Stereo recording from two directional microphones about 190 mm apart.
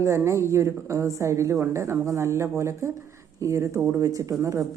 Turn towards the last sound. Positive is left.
turn(degrees=-15)  # may be behind; listen again after turning